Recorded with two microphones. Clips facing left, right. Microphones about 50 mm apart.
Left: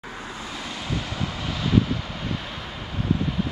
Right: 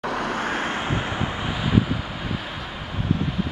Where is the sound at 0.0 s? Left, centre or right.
Right; by 2.7 s centre.